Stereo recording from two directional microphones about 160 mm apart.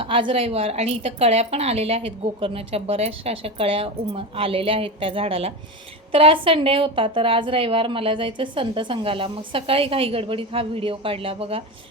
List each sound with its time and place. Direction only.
0.0 s a woman's voice: 35° right (ahead or behind)